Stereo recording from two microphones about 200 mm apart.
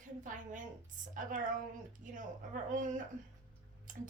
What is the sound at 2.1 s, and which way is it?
Speech, 40° right (ahead or behind).